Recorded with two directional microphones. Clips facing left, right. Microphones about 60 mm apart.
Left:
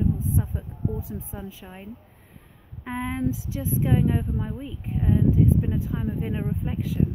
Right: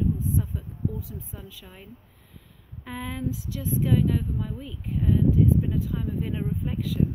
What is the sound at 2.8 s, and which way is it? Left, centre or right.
Speech, left.